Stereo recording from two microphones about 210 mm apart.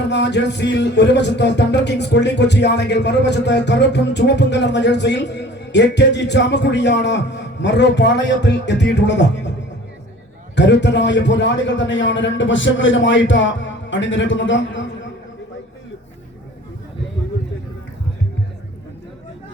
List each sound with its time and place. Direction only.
0.1 s speech: 55° left (ahead or behind)
10.5 s speech: 55° left (ahead or behind)